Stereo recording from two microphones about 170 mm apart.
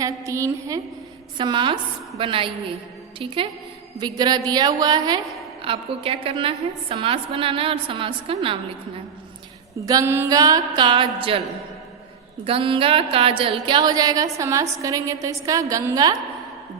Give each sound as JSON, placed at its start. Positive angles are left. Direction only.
{"t": 0.0, "sound": "a woman's voice", "side_deg": -20}
{"t": 1.4, "sound": "music", "side_deg": -30}
{"t": 3.2, "sound": "a woman's voice", "side_deg": -30}
{"t": 4.0, "sound": "music", "side_deg": -25}
{"t": 5.6, "sound": "a woman's voice", "side_deg": -35}
{"t": 9.7, "sound": "music", "side_deg": -20}
{"t": 12.5, "sound": "music", "side_deg": -30}